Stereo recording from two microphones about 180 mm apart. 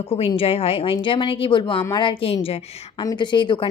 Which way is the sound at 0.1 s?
30° left (ahead or behind).